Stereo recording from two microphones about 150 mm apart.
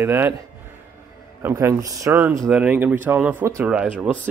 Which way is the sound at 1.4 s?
20° right (ahead or behind).